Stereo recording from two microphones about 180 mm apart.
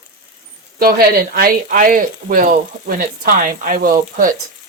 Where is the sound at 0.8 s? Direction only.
55° right (ahead or behind).